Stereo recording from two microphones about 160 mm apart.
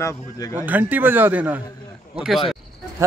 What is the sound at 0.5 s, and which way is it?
Speech, 10° right (ahead or behind).